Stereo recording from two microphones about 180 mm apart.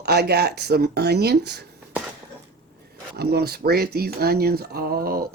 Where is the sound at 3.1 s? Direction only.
60° right (ahead or behind).